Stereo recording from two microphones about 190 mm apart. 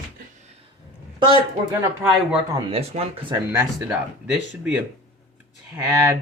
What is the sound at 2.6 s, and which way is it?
Speech, 30° right (ahead or behind).